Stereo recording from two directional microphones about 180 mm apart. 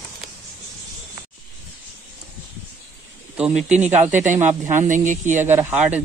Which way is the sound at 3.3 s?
5° right (ahead or behind).